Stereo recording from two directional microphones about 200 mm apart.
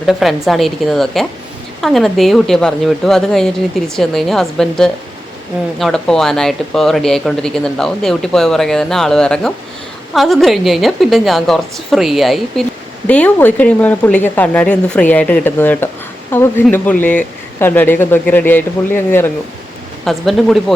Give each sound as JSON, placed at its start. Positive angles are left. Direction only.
{"t": 0.0, "sound": "speech", "side_deg": 0}